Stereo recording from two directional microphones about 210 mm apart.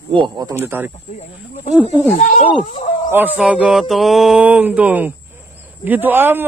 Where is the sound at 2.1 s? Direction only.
35° left (ahead or behind).